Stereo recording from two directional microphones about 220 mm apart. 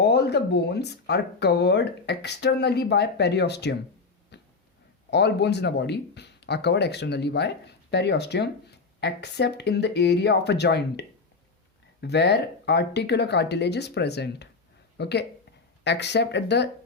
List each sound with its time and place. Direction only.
0.0 s speech: 50° left (ahead or behind)
4.3 s a sound: 50° left (ahead or behind)
5.1 s speech: 50° left (ahead or behind)